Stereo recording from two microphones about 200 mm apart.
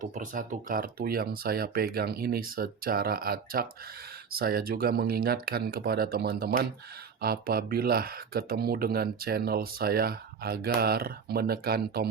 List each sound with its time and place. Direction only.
0.0 s speech: 40° right (ahead or behind)